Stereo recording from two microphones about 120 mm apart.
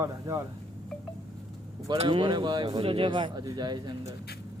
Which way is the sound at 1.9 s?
45° right (ahead or behind).